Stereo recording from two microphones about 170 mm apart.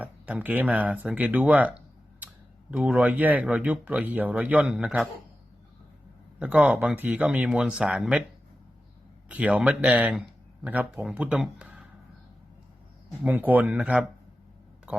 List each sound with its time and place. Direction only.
0.0 s speech: 10° right (ahead or behind)
6.4 s speech: 5° right (ahead or behind)
9.3 s speech: 5° right (ahead or behind)
13.1 s speech: 10° right (ahead or behind)
14.9 s a sound: 5° right (ahead or behind)